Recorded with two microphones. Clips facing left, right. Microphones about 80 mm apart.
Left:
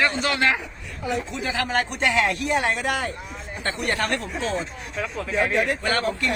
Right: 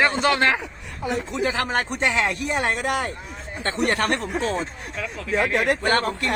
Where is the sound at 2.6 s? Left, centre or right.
Right.